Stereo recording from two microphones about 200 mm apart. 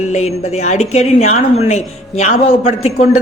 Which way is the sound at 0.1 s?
35° left (ahead or behind).